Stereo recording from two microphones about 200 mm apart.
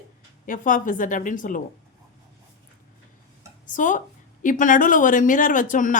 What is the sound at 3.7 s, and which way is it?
A woman's voice, 40° left (ahead or behind).